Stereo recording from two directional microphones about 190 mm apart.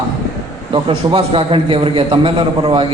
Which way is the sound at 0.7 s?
30° right (ahead or behind).